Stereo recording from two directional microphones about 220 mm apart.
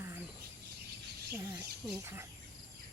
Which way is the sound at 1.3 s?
10° right (ahead or behind).